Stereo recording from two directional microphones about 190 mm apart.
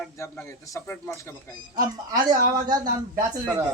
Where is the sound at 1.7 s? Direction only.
20° right (ahead or behind).